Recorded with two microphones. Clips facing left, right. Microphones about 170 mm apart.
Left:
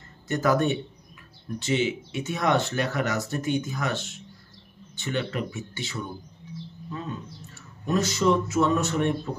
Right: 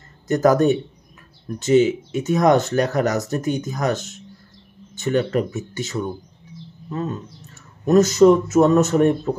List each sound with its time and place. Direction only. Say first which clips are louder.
0.3 s a man's voice: right 7 dB; 40° right (ahead or behind)